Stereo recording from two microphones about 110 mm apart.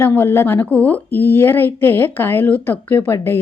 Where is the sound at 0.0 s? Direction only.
20° left (ahead or behind).